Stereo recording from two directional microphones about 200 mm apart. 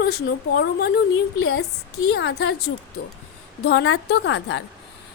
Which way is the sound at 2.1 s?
60° left (ahead or behind).